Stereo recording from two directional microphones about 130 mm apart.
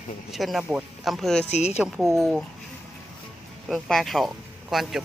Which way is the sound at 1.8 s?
5° right (ahead or behind).